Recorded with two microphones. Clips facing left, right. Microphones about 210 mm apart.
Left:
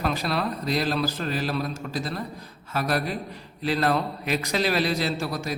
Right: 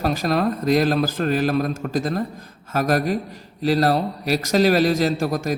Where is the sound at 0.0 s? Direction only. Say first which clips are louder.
Right 6 dB; 45° right (ahead or behind).